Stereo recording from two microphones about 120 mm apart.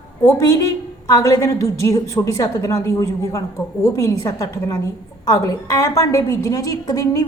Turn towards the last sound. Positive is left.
turn(degrees=30)  # may be behind; listen again after turning